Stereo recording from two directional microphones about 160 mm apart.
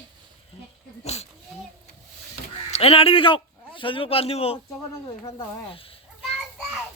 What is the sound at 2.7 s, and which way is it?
A man's voice, 40° left (ahead or behind).